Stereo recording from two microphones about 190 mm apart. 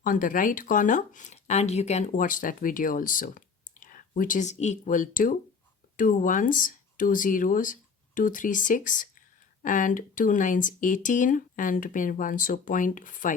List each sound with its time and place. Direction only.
0.0 s speech: 45° left (ahead or behind)